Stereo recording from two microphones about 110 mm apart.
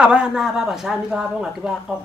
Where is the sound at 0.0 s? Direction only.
10° right (ahead or behind).